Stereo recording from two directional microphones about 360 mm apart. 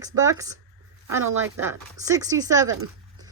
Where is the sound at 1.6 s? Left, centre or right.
Centre.